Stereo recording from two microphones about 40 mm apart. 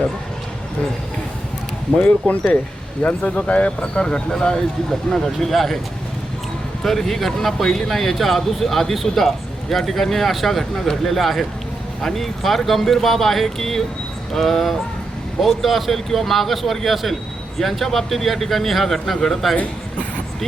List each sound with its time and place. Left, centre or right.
2.0 s speech: left
3.2 s speech: left
4.3 s speech: centre
6.8 s speech: centre